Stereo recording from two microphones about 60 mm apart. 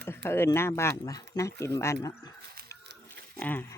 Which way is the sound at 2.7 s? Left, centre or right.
Left.